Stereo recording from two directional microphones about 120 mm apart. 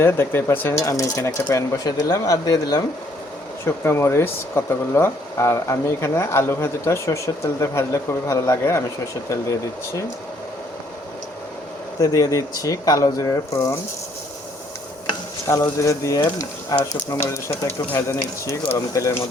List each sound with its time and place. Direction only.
0.0 s speech: 20° left (ahead or behind)
3.7 s speech: 20° left (ahead or behind)
11.9 s speech: 30° left (ahead or behind)
15.8 s speech: 25° left (ahead or behind)